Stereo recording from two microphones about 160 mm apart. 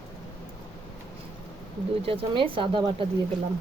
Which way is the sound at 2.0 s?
35° right (ahead or behind).